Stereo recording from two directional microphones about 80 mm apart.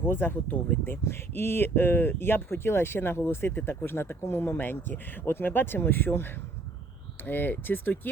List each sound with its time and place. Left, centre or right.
0.0 s speech: left